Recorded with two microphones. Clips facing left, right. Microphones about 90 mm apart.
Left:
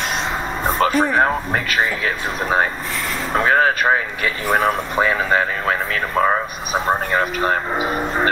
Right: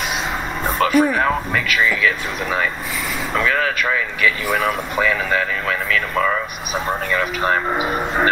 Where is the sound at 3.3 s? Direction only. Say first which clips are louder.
Left 4 dB; 40° left (ahead or behind).